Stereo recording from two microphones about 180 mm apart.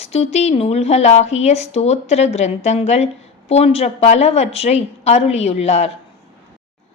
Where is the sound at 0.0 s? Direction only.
35° left (ahead or behind).